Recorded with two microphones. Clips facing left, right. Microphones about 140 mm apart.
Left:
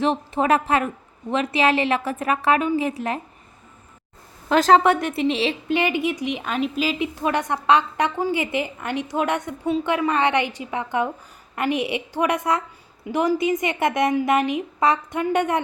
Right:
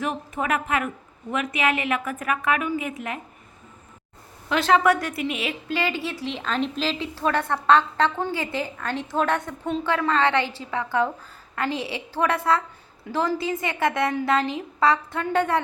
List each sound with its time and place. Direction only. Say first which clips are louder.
0.0 s a woman's voice: left 6 dB; 25° left (ahead or behind)
4.4 s speech: left 5 dB; 40° left (ahead or behind)
4.8 s a woman's voice: left 2 dB; 25° left (ahead or behind)